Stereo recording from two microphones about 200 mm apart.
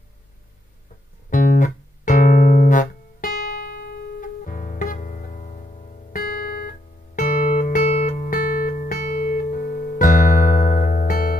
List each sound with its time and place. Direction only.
1.3 s music: 40° left (ahead or behind)